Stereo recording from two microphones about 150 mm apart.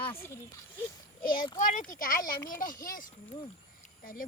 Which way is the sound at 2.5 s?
65° left (ahead or behind).